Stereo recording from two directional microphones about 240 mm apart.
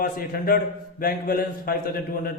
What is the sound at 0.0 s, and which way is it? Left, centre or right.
A man's voice, left.